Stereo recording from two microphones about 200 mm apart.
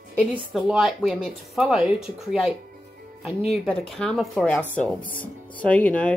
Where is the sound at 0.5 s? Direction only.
Centre (ahead or behind).